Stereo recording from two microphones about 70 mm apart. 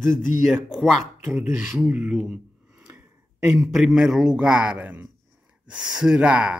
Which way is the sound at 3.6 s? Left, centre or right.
Centre.